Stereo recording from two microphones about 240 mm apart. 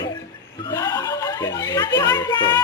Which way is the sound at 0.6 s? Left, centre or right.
Centre.